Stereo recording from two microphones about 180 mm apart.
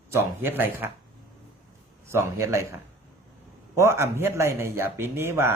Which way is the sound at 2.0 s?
15° right (ahead or behind).